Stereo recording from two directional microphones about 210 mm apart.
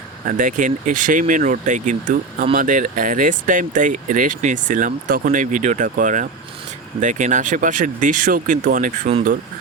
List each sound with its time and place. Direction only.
0.3 s speech: 40° right (ahead or behind)